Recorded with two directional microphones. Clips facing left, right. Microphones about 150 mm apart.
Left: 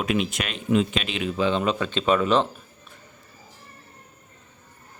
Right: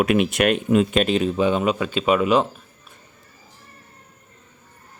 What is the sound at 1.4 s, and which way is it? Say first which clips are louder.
Speech: right 3 dB; 10° right (ahead or behind).